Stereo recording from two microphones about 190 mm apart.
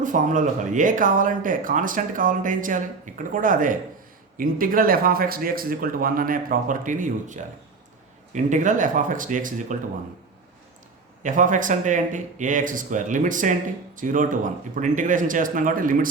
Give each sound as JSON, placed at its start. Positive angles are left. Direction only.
{"t": 0.0, "sound": "speech", "side_deg": -45}
{"t": 11.2, "sound": "speech", "side_deg": -45}